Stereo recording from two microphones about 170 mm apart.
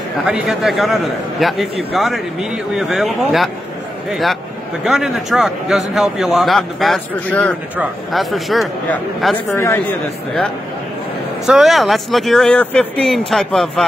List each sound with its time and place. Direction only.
0.3 s a man's voice: 5° right (ahead or behind)
7.7 s a man's voice: 5° right (ahead or behind)
9.5 s a man's voice: 15° left (ahead or behind)
11.4 s a man's voice: centre (ahead or behind)